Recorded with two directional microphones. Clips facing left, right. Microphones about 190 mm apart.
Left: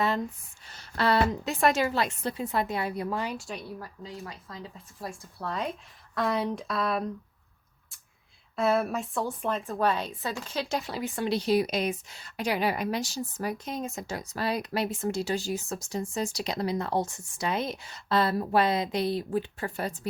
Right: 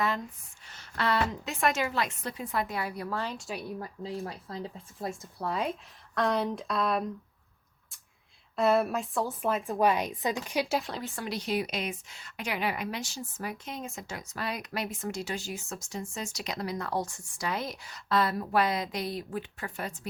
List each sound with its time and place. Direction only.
0.7 s a woman's voice: 35° left (ahead or behind); by 3.3 s 15° left (ahead or behind)
3.3 s speech: centre (ahead or behind)
3.6 s speech: 20° right (ahead or behind)
4.0 s speech: 30° right (ahead or behind)
4.9 s a woman's voice: 20° right (ahead or behind)
6.1 s speech: centre (ahead or behind)
8.5 s a woman's voice: centre (ahead or behind)
10.8 s speech: centre (ahead or behind)
11.0 s speech: 15° left (ahead or behind)
11.3 s a woman's voice: 30° left (ahead or behind)